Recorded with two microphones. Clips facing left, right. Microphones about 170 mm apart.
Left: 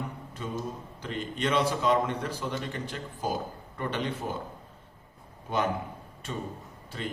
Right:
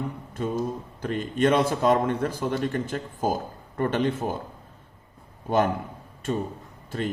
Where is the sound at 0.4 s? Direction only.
45° right (ahead or behind).